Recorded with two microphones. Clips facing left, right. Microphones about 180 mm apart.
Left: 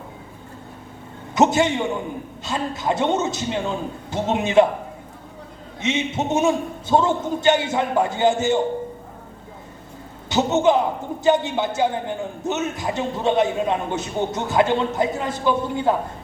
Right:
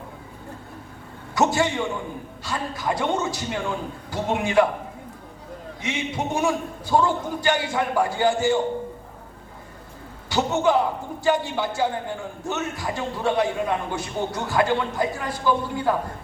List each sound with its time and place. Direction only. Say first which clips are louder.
1.4 s a man's voice: left 4 dB; 20° left (ahead or behind)
5.8 s a man's voice: left 5 dB; 20° left (ahead or behind)
10.2 s a man's voice: left 3 dB; 20° left (ahead or behind)